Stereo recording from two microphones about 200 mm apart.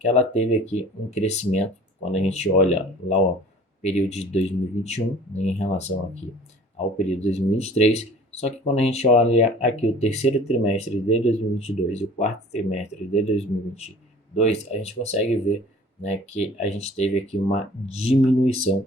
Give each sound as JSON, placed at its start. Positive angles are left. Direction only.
{"t": 0.0, "sound": "speech", "side_deg": 35}
{"t": 7.1, "sound": "speech", "side_deg": 30}